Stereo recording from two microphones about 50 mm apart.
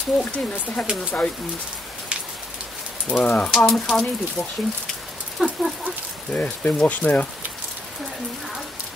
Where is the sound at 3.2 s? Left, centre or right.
Left.